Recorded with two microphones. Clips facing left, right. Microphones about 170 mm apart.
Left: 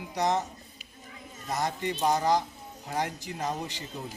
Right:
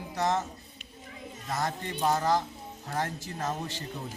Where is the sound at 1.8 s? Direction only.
15° left (ahead or behind).